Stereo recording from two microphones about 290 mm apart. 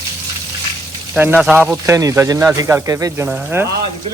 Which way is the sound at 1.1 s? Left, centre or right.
Centre.